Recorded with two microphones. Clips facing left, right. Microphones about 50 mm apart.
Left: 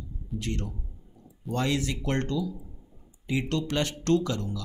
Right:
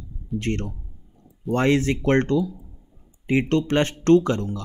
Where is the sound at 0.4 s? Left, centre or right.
Right.